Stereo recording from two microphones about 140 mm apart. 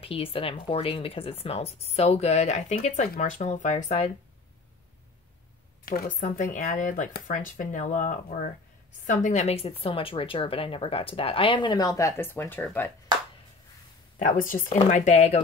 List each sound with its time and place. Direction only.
0.0 s speech: 40° left (ahead or behind)
5.9 s a woman's voice: 90° left; by 12.1 s 25° left (ahead or behind)
12.2 s speech: 15° left (ahead or behind)
14.1 s speech: 70° left (ahead or behind)
14.7 s speech: 60° left (ahead or behind)